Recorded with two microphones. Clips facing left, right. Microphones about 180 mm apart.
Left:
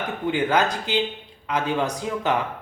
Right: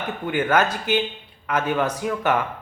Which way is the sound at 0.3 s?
15° left (ahead or behind).